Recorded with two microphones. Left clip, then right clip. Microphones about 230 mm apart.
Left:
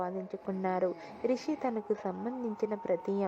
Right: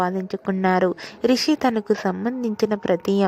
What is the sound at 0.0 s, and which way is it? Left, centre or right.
A woman's voice, right.